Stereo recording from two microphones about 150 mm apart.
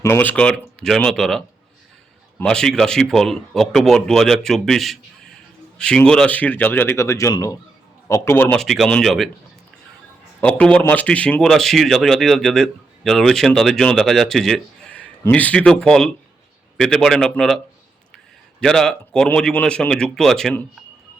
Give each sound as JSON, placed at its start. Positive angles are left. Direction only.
{"t": 0.0, "sound": "speech", "side_deg": 15}
{"t": 8.5, "sound": "speech", "side_deg": 0}
{"t": 10.4, "sound": "speech", "side_deg": 5}
{"t": 18.6, "sound": "speech", "side_deg": 5}